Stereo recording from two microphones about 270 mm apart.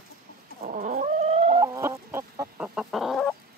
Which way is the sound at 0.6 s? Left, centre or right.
Right.